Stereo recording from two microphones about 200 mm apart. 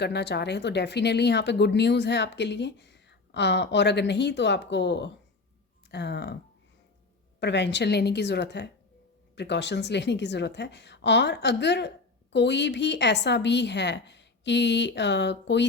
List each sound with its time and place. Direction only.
0.0 s speech: 55° left (ahead or behind)
7.3 s speech: 60° left (ahead or behind)